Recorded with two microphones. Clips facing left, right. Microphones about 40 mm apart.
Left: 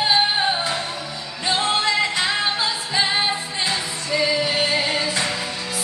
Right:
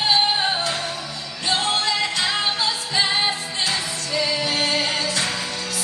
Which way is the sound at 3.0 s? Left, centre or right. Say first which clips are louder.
Left 1 dB; centre.